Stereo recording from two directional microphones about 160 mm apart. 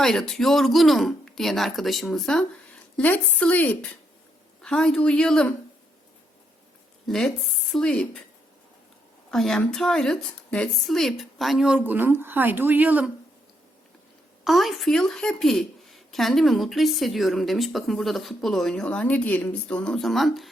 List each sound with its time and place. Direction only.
0.0 s a woman's voice: centre (ahead or behind)
7.1 s a woman's voice: 5° left (ahead or behind)
9.3 s a woman's voice: 5° left (ahead or behind)
14.4 s a woman's voice: centre (ahead or behind)